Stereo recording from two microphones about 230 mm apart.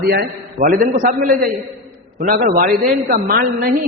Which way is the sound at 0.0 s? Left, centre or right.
Right.